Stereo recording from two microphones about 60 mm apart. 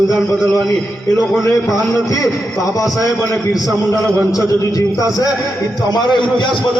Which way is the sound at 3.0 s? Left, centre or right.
Left.